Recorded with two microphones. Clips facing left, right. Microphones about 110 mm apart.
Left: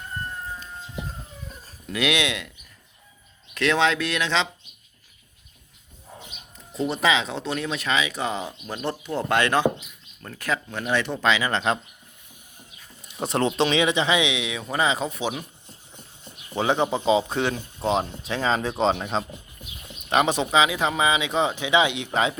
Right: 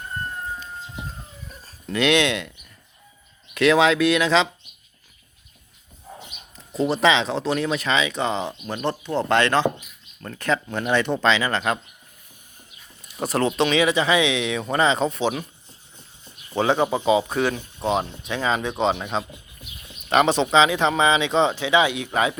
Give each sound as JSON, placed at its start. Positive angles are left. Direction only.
{"t": 1.9, "sound": "speech", "side_deg": 5}
{"t": 3.5, "sound": "speech", "side_deg": -5}
{"t": 6.9, "sound": "speech", "side_deg": 5}
{"t": 13.2, "sound": "speech", "side_deg": 25}
{"t": 16.2, "sound": "a sound", "side_deg": 15}
{"t": 17.1, "sound": "speech", "side_deg": 25}
{"t": 20.1, "sound": "speech", "side_deg": 15}